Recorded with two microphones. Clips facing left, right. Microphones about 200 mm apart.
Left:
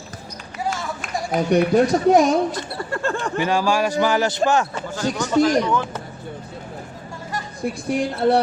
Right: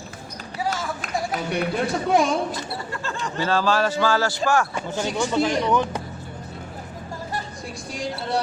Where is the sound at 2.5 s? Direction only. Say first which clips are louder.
Left 4 dB; 55° left (ahead or behind).